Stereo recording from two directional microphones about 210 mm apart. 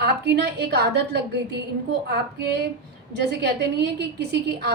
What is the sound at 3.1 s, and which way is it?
Speech, 55° right (ahead or behind).